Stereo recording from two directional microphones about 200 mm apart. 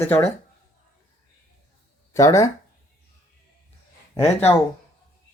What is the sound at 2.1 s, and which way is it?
Speech, 15° left (ahead or behind).